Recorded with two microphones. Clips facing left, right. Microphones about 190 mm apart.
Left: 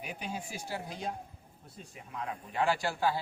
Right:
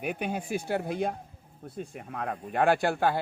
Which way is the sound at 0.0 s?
60° right (ahead or behind).